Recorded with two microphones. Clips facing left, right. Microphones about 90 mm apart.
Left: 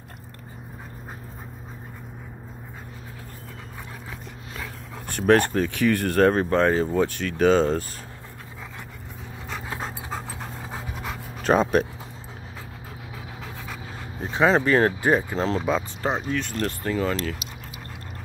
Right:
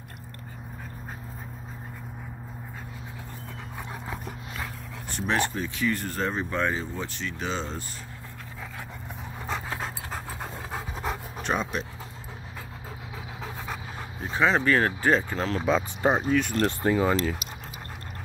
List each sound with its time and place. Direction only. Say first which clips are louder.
5.1 s speech: left 8 dB; 50° left (ahead or behind)
6.5 s speech: left 8 dB; 40° left (ahead or behind)
7.2 s speech: left 13 dB; 55° left (ahead or behind)
9.5 s dog: even; centre (ahead or behind)
11.0 s pant: right 2 dB; 35° right (ahead or behind)
11.4 s speech: left 9 dB; 40° left (ahead or behind)
14.6 s speech: left 3 dB; 25° left (ahead or behind)
15.0 s speech: left 2 dB; 15° left (ahead or behind)
15.3 s speech: left 4 dB; 30° left (ahead or behind)
16.0 s speech: right 3 dB; 10° right (ahead or behind)
16.6 s speech: right 2 dB; 20° right (ahead or behind)